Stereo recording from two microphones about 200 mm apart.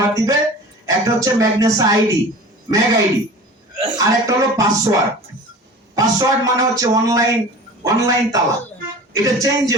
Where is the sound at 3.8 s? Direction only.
20° right (ahead or behind).